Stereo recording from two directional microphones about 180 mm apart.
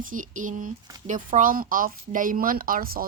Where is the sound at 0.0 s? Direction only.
45° right (ahead or behind).